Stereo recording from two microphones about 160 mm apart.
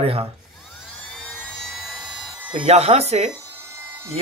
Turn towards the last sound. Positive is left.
turn(degrees=-20)  # may be behind; listen again after turning